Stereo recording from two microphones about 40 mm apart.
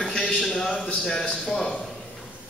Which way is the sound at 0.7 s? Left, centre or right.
Left.